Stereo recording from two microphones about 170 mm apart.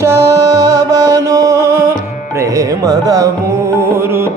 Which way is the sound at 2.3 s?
20° right (ahead or behind).